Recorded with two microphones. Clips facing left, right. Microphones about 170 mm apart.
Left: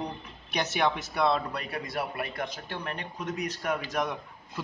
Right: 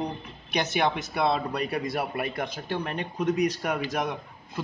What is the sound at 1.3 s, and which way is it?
Speech, 20° right (ahead or behind).